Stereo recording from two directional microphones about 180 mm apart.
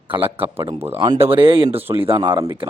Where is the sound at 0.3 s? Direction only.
30° right (ahead or behind).